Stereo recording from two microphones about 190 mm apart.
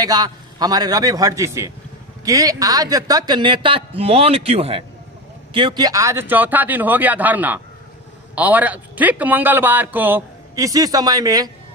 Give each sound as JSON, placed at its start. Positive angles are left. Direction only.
{"t": 0.0, "sound": "a man's voice", "side_deg": -20}